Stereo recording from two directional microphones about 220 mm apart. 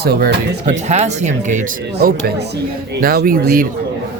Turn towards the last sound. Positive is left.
turn(degrees=-40)  # may be behind; listen again after turning